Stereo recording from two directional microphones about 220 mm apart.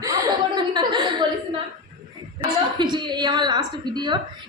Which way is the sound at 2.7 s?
20° right (ahead or behind).